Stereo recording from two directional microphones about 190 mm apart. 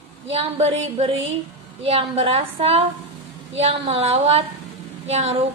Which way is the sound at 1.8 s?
30° right (ahead or behind).